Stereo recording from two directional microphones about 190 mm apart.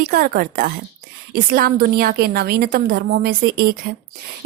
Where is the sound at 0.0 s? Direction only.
50° right (ahead or behind).